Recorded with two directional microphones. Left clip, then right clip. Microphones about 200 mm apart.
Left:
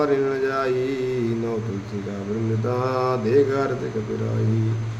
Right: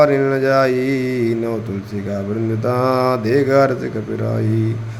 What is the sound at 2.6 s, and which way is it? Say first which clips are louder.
A man's voice: right 7 dB; 35° right (ahead or behind).